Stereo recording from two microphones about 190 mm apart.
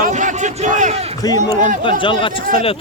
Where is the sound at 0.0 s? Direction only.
40° right (ahead or behind).